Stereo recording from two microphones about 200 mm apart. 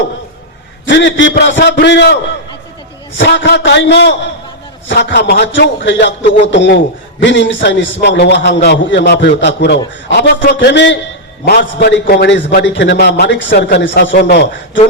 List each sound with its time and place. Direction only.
0.9 s a man's voice: 60° left (ahead or behind)
3.2 s a man's voice: 60° left (ahead or behind)